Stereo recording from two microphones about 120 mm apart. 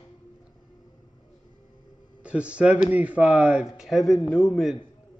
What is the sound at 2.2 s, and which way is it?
A man's voice, 10° right (ahead or behind).